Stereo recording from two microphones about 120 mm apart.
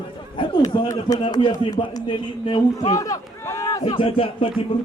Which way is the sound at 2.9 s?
30° left (ahead or behind).